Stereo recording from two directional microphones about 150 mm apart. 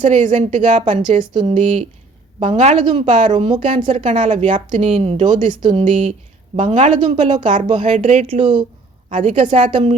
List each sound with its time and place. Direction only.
0.0 s a woman's voice: 55° right (ahead or behind)
1.2 s speech: 30° right (ahead or behind)
1.5 s speech: 55° right (ahead or behind)
3.4 s speech: 30° right (ahead or behind)
3.8 s a woman's voice: 55° right (ahead or behind); by 8.6 s 35° right (ahead or behind)
9.0 s a woman's voice: 55° right (ahead or behind)